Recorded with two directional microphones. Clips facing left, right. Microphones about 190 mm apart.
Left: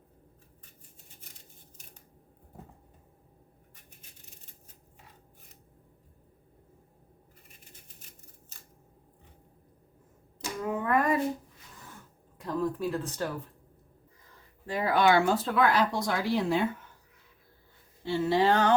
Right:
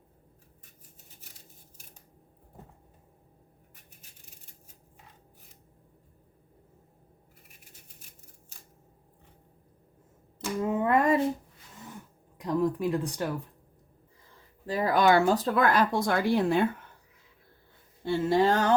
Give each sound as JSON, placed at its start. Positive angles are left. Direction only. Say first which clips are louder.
{"t": 10.6, "sound": "a sound", "louder": "right 3 dB", "side_deg": -25}
{"t": 12.4, "sound": "speech", "louder": "right 3 dB", "side_deg": -15}
{"t": 14.7, "sound": "speech", "louder": "right 1 dB", "side_deg": -40}
{"t": 18.0, "sound": "speech", "louder": "right 1 dB", "side_deg": -50}